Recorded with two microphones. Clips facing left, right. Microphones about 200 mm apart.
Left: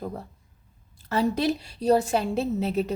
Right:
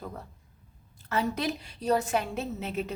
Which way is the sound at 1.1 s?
30° left (ahead or behind).